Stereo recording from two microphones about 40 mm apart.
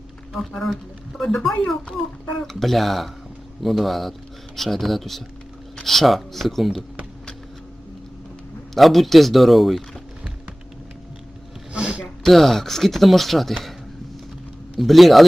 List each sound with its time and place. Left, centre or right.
0.3 s speech: centre
2.4 s speech: centre
8.7 s speech: centre
11.7 s a sound: right
12.2 s speech: centre
14.8 s speech: centre